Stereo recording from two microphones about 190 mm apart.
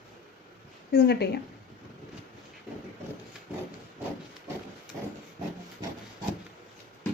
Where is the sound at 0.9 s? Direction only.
60° left (ahead or behind).